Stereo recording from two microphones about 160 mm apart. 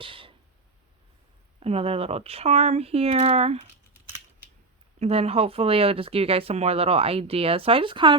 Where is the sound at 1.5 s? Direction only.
35° right (ahead or behind).